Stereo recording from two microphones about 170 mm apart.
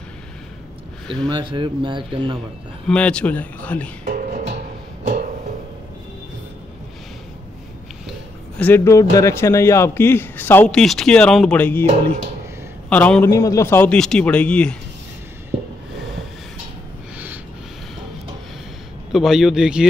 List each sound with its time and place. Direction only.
1.3 s speech: 30° right (ahead or behind)
2.9 s a man's voice: 5° left (ahead or behind)
4.0 s music: 55° right (ahead or behind)
8.5 s a man's voice: 10° left (ahead or behind)
12.9 s a man's voice: 10° left (ahead or behind)
19.1 s speech: 5° right (ahead or behind)